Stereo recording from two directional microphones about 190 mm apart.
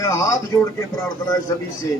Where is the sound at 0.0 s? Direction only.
15° left (ahead or behind).